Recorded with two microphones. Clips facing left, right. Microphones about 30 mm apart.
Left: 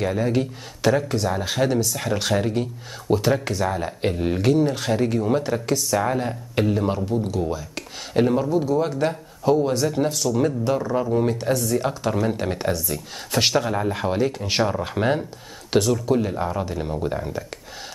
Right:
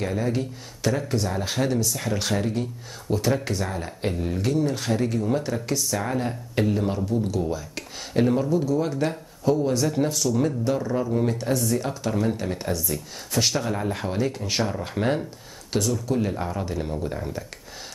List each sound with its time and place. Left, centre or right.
0.0 s speech: centre
4.2 s speech: left
4.7 s speech: centre
9.8 s speech: centre
11.8 s speech: left
13.3 s speech: left
13.6 s speech: centre
15.7 s speech: left
16.2 s speech: centre